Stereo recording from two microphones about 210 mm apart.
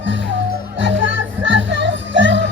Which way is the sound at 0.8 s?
60° right (ahead or behind).